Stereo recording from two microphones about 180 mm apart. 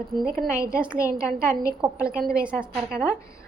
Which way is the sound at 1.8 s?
5° right (ahead or behind).